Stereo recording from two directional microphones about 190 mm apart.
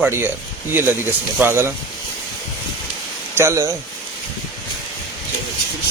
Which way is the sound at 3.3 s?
15° right (ahead or behind).